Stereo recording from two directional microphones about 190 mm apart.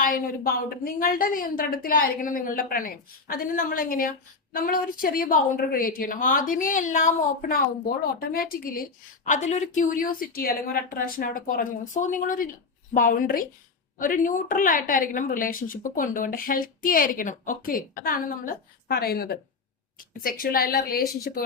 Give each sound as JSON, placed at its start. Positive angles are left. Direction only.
{"t": 0.0, "sound": "a woman's voice", "side_deg": 50}